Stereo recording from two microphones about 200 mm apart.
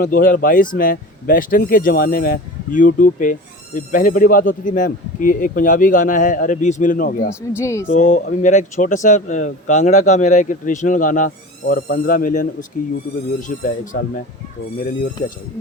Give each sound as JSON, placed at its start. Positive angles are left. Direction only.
{"t": 0.0, "sound": "speech", "side_deg": 45}
{"t": 7.3, "sound": "speech", "side_deg": 15}
{"t": 7.9, "sound": "speech", "side_deg": 40}